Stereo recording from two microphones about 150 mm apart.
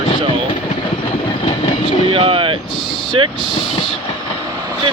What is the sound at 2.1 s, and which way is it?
Speech, 40° right (ahead or behind).